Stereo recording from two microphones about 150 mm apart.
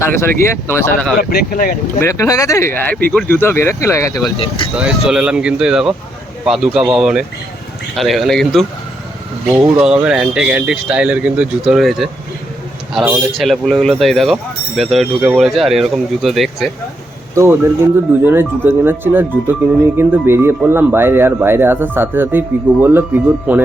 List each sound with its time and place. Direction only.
0.0 s speech: 20° left (ahead or behind)
1.2 s speech: 90° left; by 1.7 s 70° left (ahead or behind)
2.0 s speech: 20° left (ahead or behind)
4.4 s speech: 35° left (ahead or behind)
4.7 s speech: 5° right (ahead or behind)
9.8 s speech: 5° right (ahead or behind)
13.3 s speech: centre (ahead or behind)
17.3 s speech: 15° right (ahead or behind)